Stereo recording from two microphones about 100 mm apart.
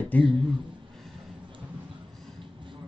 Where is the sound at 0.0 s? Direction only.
15° left (ahead or behind).